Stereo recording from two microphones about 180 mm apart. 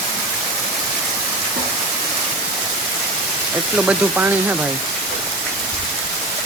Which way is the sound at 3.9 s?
10° right (ahead or behind).